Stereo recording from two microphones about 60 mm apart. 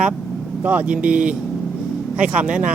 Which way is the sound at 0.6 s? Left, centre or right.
Right.